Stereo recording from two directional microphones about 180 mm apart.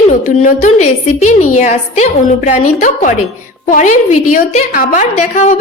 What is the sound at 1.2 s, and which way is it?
A woman's voice, 45° left (ahead or behind).